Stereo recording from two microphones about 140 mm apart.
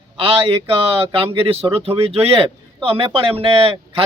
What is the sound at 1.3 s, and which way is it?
Speech, 40° right (ahead or behind).